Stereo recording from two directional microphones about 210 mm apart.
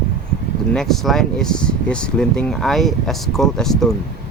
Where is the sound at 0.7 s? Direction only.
Centre (ahead or behind).